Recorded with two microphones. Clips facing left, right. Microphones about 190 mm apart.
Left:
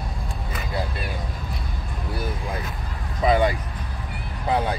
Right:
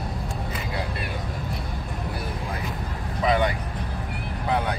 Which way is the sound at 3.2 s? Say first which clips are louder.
Left 3 dB; 30° left (ahead or behind).